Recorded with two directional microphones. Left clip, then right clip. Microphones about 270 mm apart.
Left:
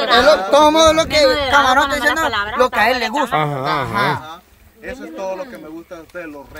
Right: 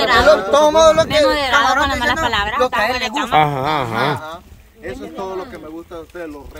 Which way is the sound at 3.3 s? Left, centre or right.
Centre.